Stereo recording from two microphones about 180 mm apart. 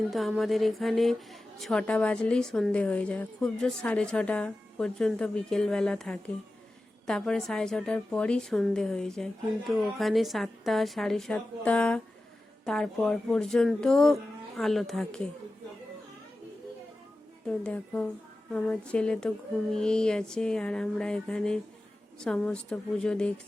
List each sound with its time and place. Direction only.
0.1 s a woman's voice: centre (ahead or behind)
17.6 s a woman's voice: 5° left (ahead or behind)